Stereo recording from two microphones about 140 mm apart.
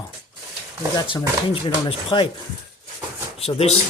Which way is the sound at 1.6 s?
35° left (ahead or behind).